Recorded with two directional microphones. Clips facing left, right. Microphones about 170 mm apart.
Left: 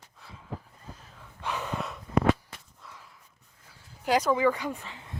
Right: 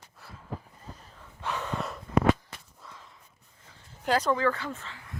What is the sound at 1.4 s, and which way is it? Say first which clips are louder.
Gasp: even; 15° left (ahead or behind).